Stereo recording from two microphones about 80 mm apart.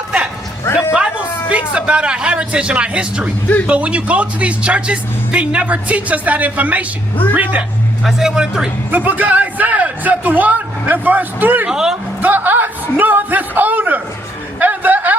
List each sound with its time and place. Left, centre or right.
0.6 s a man's voice: left
1.5 s speech: centre
8.0 s speech: centre
8.9 s speech: right
11.6 s speech: centre
12.2 s a man's voice: right
14.6 s a sound: right